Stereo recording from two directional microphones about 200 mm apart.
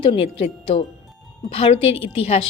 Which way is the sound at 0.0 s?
25° left (ahead or behind).